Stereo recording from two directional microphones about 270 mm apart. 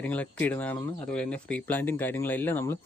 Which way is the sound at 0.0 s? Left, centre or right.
Centre.